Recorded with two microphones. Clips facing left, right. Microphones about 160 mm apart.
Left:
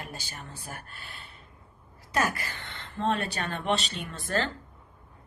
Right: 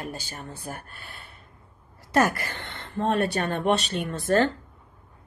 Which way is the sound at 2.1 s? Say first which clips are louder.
Right 6 dB; 60° right (ahead or behind).